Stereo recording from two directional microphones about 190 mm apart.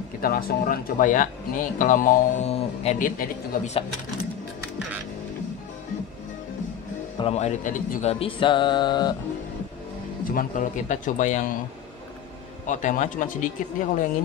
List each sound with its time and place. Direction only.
0.2 s speech: 50° left (ahead or behind)
7.2 s a man's voice: 35° left (ahead or behind)
8.1 s music: 30° left (ahead or behind)
10.2 s a man's voice: 45° left (ahead or behind)
12.6 s speech: 40° left (ahead or behind)